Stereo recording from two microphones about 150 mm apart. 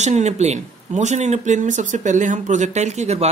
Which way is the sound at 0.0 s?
50° right (ahead or behind).